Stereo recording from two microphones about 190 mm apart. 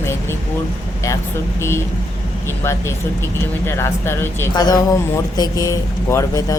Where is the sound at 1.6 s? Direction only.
15° left (ahead or behind).